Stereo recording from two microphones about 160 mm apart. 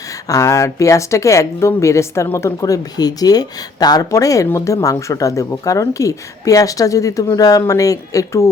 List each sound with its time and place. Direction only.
0.3 s speech: 20° left (ahead or behind)